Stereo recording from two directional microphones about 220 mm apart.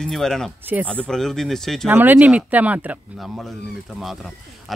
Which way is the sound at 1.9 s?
10° right (ahead or behind).